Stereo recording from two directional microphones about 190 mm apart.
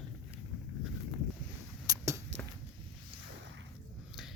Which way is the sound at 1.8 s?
20° right (ahead or behind).